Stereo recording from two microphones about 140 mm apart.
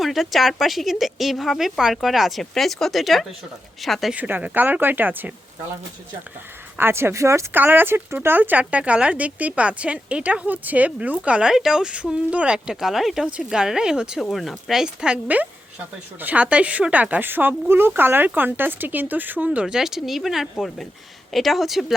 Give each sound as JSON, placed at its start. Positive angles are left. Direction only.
{"t": 0.0, "sound": "speech", "side_deg": 0}
{"t": 4.1, "sound": "speech", "side_deg": -10}
{"t": 6.7, "sound": "speech", "side_deg": -15}